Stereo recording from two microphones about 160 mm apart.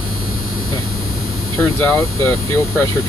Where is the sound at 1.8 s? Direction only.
15° left (ahead or behind).